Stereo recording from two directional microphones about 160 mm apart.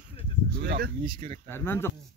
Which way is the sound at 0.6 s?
85° right.